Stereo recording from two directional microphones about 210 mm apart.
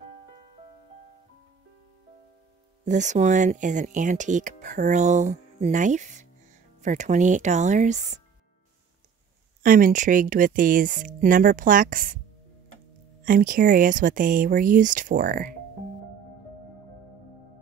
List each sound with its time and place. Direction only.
2.8 s speech: 35° right (ahead or behind)
9.6 s speech: 40° right (ahead or behind)
13.2 s speech: 40° right (ahead or behind)